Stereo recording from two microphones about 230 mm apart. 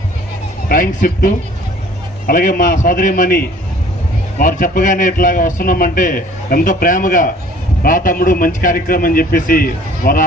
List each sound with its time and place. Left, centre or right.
0.7 s a man's voice: left